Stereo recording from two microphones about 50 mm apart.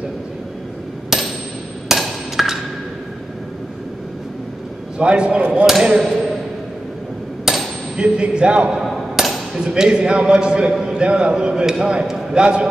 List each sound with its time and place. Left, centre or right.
1.1 s hammer: centre
4.9 s speech: centre
5.9 s a man's voice: centre
7.5 s hammer: centre
8.0 s speech: centre
8.7 s a sound: centre
9.6 s a man's voice: centre